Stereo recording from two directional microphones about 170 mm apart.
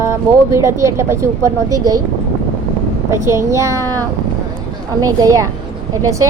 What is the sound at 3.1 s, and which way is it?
Speech, 15° right (ahead or behind).